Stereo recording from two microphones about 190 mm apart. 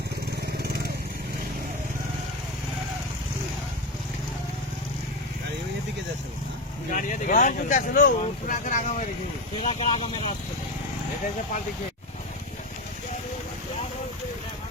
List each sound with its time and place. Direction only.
6.9 s speech: 45° left (ahead or behind)
9.6 s speech: 30° left (ahead or behind)